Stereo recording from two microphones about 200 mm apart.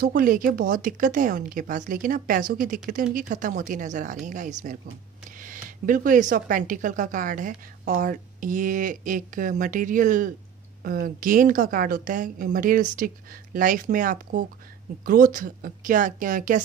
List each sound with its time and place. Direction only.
0.0 s speech: 45° right (ahead or behind)